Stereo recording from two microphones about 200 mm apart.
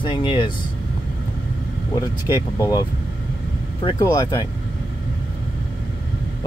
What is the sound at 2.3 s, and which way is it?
Speech, 20° left (ahead or behind).